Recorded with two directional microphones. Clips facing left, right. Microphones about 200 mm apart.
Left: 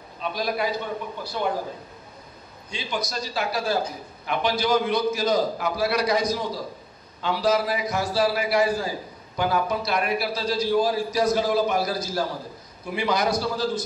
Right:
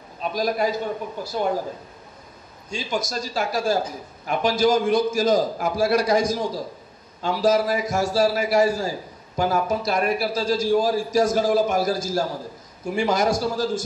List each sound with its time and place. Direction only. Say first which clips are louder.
0.2 s a man's voice: right 3 dB; 45° right (ahead or behind)
2.7 s a man's voice: right 3 dB; 45° right (ahead or behind)